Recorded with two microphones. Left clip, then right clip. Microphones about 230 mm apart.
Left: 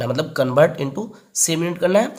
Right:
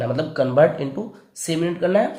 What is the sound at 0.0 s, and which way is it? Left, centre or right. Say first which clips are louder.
Speech: left 1 dB; left.